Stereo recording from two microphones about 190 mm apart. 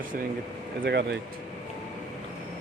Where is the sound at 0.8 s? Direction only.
65° right (ahead or behind).